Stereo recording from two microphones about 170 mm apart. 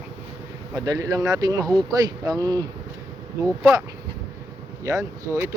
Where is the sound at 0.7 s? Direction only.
20° right (ahead or behind).